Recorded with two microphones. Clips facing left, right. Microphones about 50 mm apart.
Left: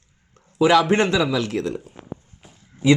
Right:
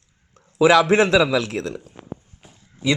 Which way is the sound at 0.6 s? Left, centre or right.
Right.